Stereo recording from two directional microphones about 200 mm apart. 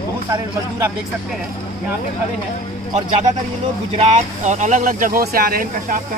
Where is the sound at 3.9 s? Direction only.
35° right (ahead or behind).